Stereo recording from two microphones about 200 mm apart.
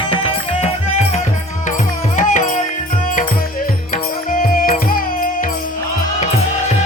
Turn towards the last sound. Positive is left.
turn(degrees=45)  # may be behind; listen again after turning